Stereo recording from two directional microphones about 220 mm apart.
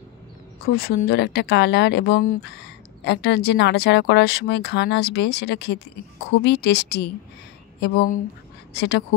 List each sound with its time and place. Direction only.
0.7 s speech: 40° left (ahead or behind)